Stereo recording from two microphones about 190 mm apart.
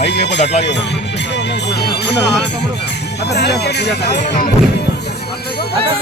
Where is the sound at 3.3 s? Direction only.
60° left (ahead or behind).